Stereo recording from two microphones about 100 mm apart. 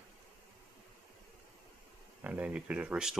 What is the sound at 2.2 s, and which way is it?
Speech, 15° right (ahead or behind).